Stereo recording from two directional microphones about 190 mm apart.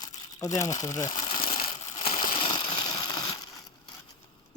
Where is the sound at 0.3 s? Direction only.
15° left (ahead or behind).